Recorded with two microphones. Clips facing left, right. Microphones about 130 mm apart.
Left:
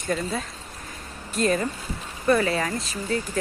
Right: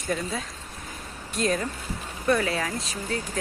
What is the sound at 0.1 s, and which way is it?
Speech, centre (ahead or behind).